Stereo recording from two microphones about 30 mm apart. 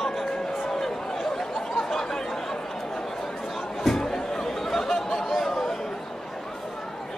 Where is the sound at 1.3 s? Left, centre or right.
Centre.